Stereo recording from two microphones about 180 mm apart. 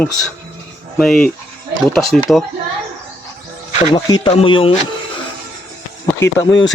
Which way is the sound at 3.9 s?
30° left (ahead or behind).